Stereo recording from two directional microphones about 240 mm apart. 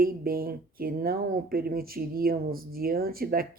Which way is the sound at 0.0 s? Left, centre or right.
Right.